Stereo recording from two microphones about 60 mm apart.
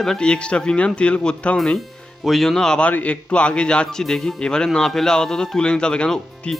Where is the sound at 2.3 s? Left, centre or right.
Centre.